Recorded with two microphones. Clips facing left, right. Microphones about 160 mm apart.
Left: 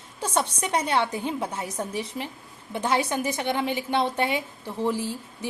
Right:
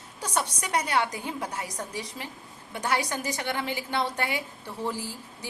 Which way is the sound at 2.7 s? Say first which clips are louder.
Left 4 dB; 25° left (ahead or behind).